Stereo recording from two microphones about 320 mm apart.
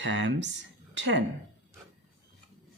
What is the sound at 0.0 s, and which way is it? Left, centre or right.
Speech, right.